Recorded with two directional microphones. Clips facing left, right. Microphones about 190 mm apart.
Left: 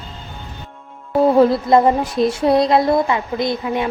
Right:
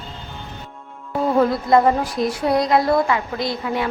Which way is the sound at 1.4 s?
25° left (ahead or behind).